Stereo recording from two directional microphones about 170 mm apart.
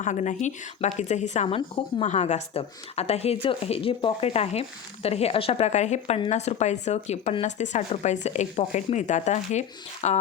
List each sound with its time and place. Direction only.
0.0 s a woman's voice: 45° left (ahead or behind)